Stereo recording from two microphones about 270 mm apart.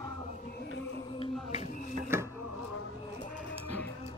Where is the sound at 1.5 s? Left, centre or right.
Left.